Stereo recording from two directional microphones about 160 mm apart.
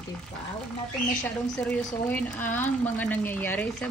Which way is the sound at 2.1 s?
10° left (ahead or behind).